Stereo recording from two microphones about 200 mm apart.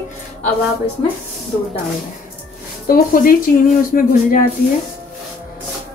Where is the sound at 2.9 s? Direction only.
45° left (ahead or behind).